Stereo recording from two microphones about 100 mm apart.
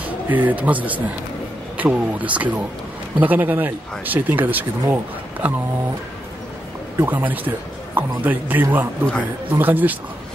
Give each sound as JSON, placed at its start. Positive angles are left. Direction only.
{"t": 0.3, "sound": "speech", "side_deg": -15}
{"t": 7.0, "sound": "speech", "side_deg": -20}